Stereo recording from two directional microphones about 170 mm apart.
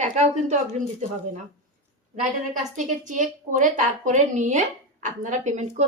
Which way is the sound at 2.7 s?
50° right (ahead or behind).